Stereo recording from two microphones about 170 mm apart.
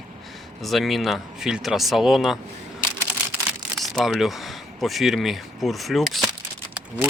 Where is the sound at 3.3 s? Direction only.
Centre (ahead or behind).